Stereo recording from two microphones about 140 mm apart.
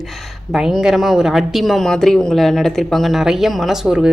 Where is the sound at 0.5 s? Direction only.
5° right (ahead or behind).